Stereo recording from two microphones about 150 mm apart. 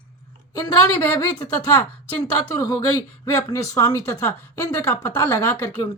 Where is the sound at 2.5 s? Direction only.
20° left (ahead or behind).